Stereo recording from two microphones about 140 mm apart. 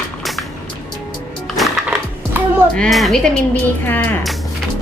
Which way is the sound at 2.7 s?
5° left (ahead or behind).